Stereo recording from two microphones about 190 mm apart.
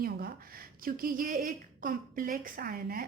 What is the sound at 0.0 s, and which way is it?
A woman's voice, 55° right (ahead or behind).